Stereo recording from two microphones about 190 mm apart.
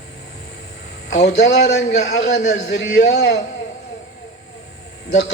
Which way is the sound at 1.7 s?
60° left (ahead or behind).